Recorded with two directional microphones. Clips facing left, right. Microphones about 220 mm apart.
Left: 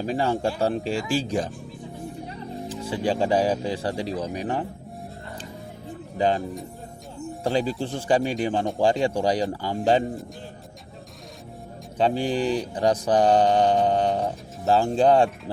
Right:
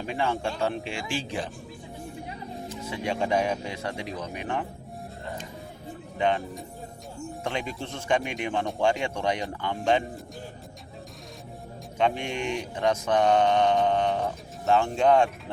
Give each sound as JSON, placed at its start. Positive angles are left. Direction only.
{"t": 0.0, "sound": "speech", "side_deg": 35}
{"t": 2.6, "sound": "speech", "side_deg": 30}
{"t": 6.1, "sound": "speech", "side_deg": 35}
{"t": 7.4, "sound": "speech", "side_deg": 35}
{"t": 11.9, "sound": "speech", "side_deg": 35}